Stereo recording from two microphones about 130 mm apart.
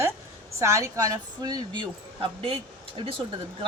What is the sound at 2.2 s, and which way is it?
Speech, 40° right (ahead or behind).